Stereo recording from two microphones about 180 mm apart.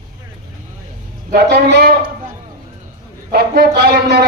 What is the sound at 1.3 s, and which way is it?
Speech, 65° right (ahead or behind).